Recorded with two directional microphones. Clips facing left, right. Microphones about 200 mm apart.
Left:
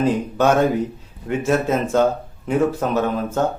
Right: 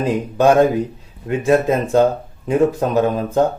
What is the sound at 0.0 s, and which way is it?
A man's voice, 15° right (ahead or behind).